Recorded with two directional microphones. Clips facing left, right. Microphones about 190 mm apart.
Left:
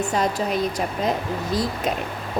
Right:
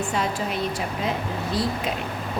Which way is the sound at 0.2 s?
40° left (ahead or behind).